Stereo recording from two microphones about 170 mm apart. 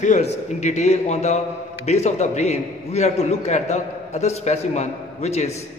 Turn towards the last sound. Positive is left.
turn(degrees=40)  # may be behind; listen again after turning